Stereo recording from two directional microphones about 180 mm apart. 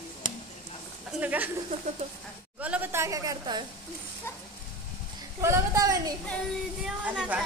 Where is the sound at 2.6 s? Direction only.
10° right (ahead or behind).